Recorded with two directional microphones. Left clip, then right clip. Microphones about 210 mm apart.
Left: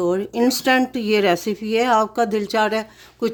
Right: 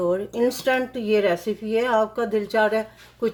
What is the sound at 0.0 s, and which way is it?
Speech, 50° left (ahead or behind).